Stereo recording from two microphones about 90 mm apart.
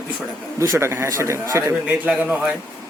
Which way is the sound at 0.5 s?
35° right (ahead or behind).